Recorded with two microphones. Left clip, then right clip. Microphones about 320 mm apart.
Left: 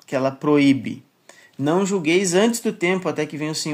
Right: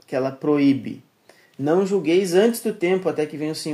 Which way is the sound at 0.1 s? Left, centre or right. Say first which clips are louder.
Left 2 dB; left.